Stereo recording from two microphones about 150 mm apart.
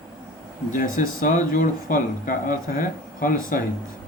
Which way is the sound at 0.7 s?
65° left (ahead or behind).